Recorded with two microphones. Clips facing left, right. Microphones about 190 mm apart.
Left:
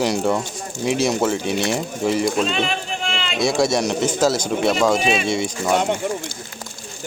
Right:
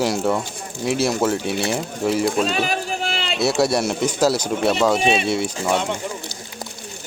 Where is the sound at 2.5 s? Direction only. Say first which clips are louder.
Right 1 dB; 40° right (ahead or behind).